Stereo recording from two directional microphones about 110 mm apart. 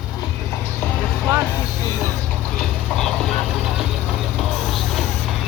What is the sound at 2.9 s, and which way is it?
Speech, 5° left (ahead or behind).